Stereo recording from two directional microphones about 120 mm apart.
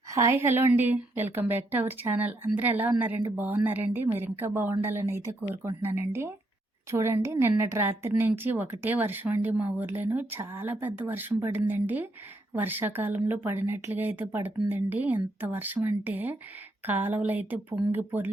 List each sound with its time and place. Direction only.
0.1 s a woman's voice: 25° right (ahead or behind)